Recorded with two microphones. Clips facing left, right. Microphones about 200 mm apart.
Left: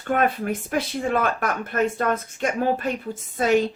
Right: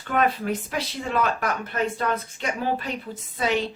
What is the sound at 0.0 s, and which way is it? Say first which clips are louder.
Speech: left 1 dB; 50° left (ahead or behind).